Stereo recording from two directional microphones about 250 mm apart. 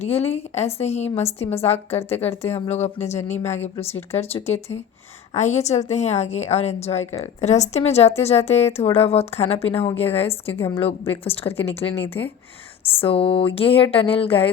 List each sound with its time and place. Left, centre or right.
0.0 s a woman's voice: left
2.0 s speech: centre
2.6 s a woman's voice: left
3.2 s speech: centre
5.3 s a woman's voice: left
7.0 s speech: centre
7.4 s a woman's voice: left
10.5 s speech: centre
11.2 s a woman's voice: left
12.0 s speech: centre
13.0 s a woman's voice: left